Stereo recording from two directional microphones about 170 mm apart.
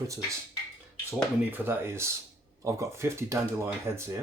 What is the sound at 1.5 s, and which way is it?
Speech, 10° right (ahead or behind).